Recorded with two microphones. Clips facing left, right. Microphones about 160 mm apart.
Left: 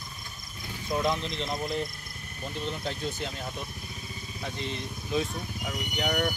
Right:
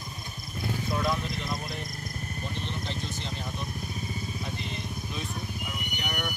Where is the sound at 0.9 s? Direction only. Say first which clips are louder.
Left 3 dB; 20° left (ahead or behind).